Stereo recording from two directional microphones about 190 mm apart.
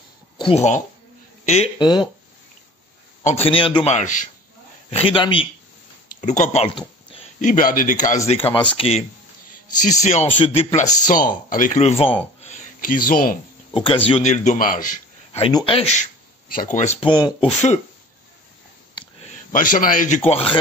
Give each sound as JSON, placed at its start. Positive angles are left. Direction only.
{"t": 0.4, "sound": "speech", "side_deg": 30}
{"t": 3.3, "sound": "a man's voice", "side_deg": 30}
{"t": 4.9, "sound": "speech", "side_deg": 30}
{"t": 6.0, "sound": "a sound", "side_deg": 40}
{"t": 7.4, "sound": "speech", "side_deg": 45}
{"t": 8.5, "sound": "speech", "side_deg": 25}
{"t": 10.3, "sound": "a man's voice", "side_deg": 30}
{"t": 12.4, "sound": "a sound", "side_deg": 40}
{"t": 13.7, "sound": "a man's voice", "side_deg": 30}
{"t": 15.3, "sound": "speech", "side_deg": 30}
{"t": 17.1, "sound": "speech", "side_deg": 25}
{"t": 18.9, "sound": "a sound", "side_deg": 35}
{"t": 20.2, "sound": "a man's voice", "side_deg": 30}